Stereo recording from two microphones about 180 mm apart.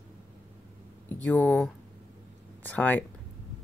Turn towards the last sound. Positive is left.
turn(degrees=10)  # may be behind; listen again after turning